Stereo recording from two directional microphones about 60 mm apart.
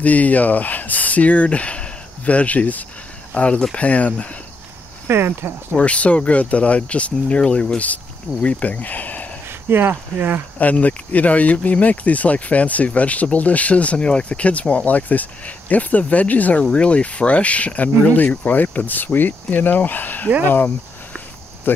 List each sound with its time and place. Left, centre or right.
0.0 s speech: left
5.0 s speech: right
5.7 s speech: left
9.7 s speech: right
10.6 s speech: left